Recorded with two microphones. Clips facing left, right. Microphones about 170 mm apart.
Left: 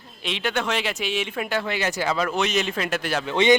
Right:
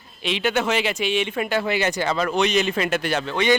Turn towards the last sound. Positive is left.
turn(degrees=20)  # may be behind; listen again after turning